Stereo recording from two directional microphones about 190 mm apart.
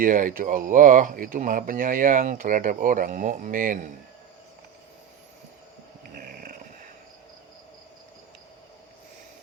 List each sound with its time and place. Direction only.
0.0 s speech: 45° right (ahead or behind)
6.0 s snoring: 50° right (ahead or behind)